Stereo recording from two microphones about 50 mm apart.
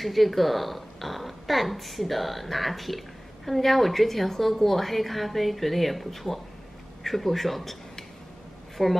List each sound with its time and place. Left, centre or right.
0.0 s a woman's voice: centre
8.8 s a woman's voice: centre